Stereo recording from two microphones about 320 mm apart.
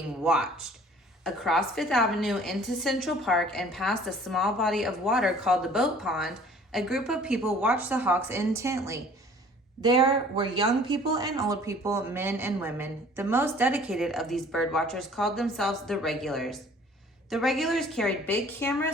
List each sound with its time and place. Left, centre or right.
1.2 s a woman's voice: centre